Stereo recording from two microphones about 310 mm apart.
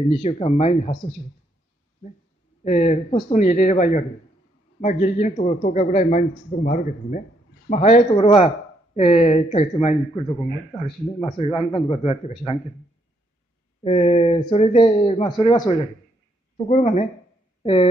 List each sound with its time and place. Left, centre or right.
0.1 s a man's voice: centre
2.6 s a man's voice: left
13.8 s a man's voice: centre